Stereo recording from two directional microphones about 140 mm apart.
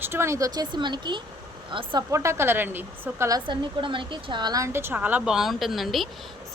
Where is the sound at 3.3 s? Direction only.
35° right (ahead or behind).